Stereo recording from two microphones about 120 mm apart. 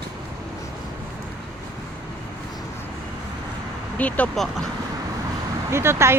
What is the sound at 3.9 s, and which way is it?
Speech, 10° left (ahead or behind).